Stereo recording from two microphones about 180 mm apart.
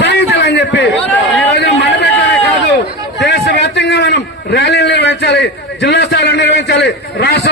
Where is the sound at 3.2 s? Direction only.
70° left (ahead or behind).